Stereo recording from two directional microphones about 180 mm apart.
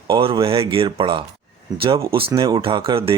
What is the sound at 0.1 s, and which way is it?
Speech, 30° right (ahead or behind).